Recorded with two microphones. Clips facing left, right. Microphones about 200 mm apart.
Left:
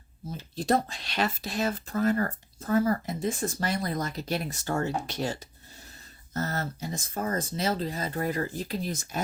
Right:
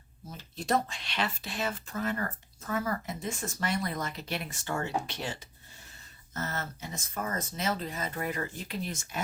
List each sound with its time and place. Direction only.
0.3 s speech: 35° left (ahead or behind)